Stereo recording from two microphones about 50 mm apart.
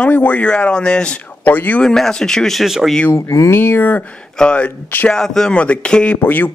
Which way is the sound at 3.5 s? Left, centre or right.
Left.